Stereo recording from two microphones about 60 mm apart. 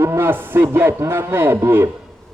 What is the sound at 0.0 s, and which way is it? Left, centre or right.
Speech, right.